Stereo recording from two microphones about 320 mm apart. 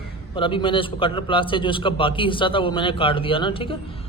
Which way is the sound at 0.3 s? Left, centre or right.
Centre.